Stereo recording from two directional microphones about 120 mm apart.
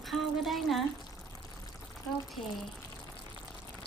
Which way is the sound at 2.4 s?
50° left (ahead or behind).